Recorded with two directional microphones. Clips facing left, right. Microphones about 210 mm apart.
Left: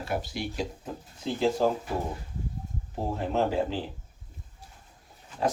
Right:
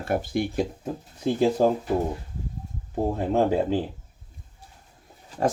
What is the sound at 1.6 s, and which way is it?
Speech, 50° right (ahead or behind).